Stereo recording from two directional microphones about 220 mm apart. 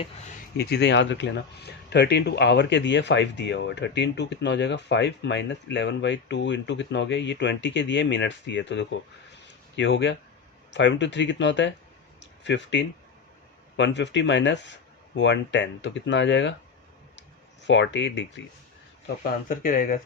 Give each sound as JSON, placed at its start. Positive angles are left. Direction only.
{"t": 0.5, "sound": "speech", "side_deg": 50}
{"t": 12.2, "sound": "a sound", "side_deg": 55}
{"t": 13.7, "sound": "speech", "side_deg": 55}
{"t": 19.2, "sound": "speech", "side_deg": 35}